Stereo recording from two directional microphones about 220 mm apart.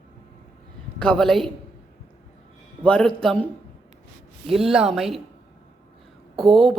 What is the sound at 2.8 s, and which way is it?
Speech, 5° left (ahead or behind).